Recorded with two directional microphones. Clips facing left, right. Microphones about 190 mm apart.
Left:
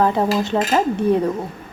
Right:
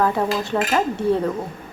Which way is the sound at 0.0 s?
25° left (ahead or behind).